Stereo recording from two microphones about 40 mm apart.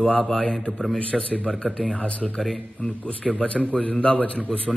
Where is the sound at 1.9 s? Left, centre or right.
Left.